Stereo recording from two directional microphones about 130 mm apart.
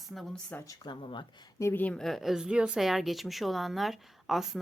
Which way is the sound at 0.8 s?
35° left (ahead or behind).